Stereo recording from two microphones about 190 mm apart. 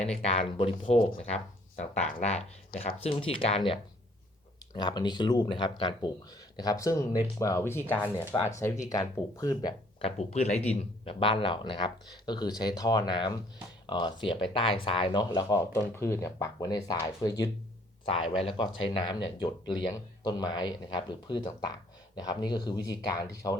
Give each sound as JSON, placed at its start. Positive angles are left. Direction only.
{"t": 0.0, "sound": "speech", "side_deg": 35}
{"t": 4.8, "sound": "speech", "side_deg": 20}
{"t": 10.2, "sound": "speech", "side_deg": 35}